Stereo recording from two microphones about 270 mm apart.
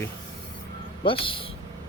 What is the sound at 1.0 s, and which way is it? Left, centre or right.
Speech, centre.